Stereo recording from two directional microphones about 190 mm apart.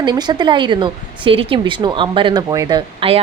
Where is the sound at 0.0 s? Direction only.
25° right (ahead or behind).